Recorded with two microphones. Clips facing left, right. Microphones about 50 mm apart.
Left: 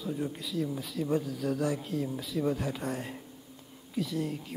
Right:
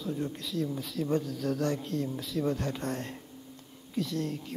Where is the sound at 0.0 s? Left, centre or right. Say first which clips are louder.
Even; centre.